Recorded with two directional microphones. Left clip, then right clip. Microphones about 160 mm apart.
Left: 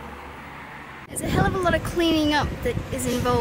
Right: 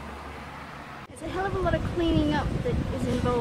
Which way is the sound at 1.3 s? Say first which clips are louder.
Left 5 dB; 20° left (ahead or behind).